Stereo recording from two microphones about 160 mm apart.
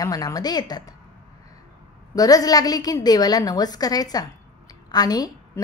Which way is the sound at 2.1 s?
25° left (ahead or behind).